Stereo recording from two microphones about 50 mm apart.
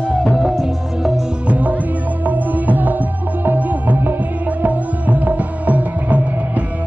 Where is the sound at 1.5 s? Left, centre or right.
Right.